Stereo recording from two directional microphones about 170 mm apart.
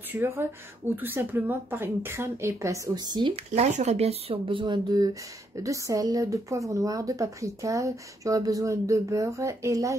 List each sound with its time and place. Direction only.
0.1 s speech: 15° right (ahead or behind)
3.5 s speech: 40° right (ahead or behind); by 9.9 s 20° right (ahead or behind)